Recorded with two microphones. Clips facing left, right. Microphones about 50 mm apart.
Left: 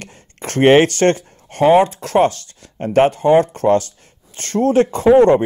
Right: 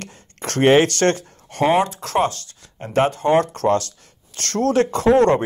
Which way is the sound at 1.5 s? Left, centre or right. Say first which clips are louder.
Left 6 dB; left.